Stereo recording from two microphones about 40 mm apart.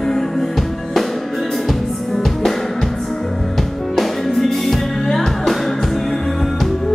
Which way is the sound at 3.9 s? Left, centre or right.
Centre.